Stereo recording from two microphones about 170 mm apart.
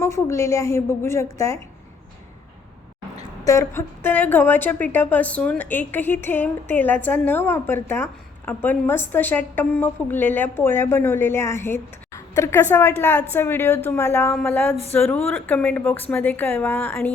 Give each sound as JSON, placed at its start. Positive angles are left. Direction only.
{"t": 0.0, "sound": "a woman's voice", "side_deg": 15}
{"t": 3.2, "sound": "a woman's voice", "side_deg": 20}